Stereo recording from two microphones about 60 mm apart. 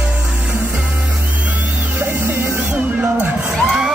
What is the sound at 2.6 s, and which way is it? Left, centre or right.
Music, right.